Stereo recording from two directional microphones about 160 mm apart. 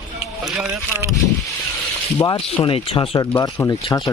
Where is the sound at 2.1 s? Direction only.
35° left (ahead or behind).